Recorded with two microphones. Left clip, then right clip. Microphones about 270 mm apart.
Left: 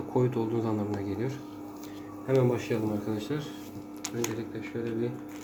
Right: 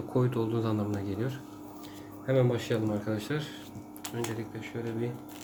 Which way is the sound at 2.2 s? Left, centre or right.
Right.